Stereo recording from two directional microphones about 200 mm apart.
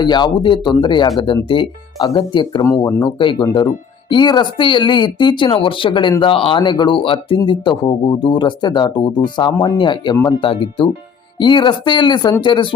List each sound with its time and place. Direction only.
0.0 s speech: 20° left (ahead or behind)